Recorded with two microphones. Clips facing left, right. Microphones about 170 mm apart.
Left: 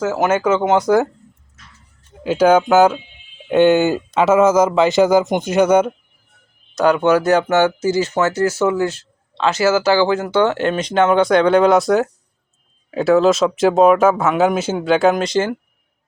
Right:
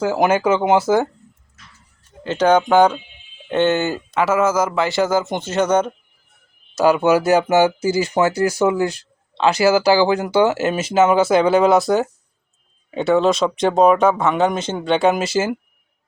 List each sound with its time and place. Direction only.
0.1 s speech: 10° right (ahead or behind)
2.2 s speech: 10° left (ahead or behind)
6.7 s speech: 5° right (ahead or behind)